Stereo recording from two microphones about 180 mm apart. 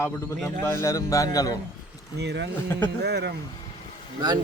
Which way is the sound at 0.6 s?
15° left (ahead or behind).